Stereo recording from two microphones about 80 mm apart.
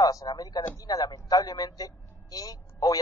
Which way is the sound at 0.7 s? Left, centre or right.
Left.